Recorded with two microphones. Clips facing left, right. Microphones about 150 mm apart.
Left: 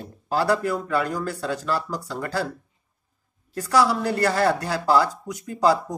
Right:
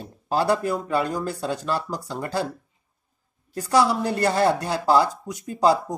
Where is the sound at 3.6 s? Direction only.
20° right (ahead or behind).